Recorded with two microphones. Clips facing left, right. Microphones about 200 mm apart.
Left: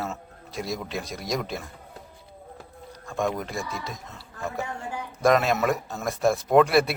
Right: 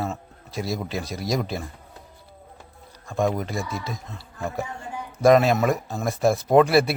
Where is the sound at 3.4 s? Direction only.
Centre (ahead or behind).